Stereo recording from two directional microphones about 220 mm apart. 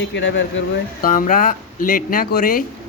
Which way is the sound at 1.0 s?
40° left (ahead or behind).